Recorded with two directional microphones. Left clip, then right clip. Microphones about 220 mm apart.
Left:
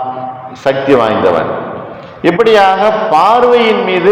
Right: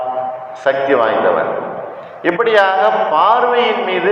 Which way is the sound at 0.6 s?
50° left (ahead or behind).